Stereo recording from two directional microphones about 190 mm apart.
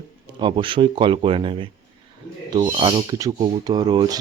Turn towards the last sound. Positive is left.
turn(degrees=-20)  # may be behind; listen again after turning